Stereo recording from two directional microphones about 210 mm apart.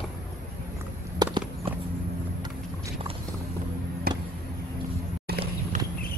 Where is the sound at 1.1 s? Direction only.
20° right (ahead or behind).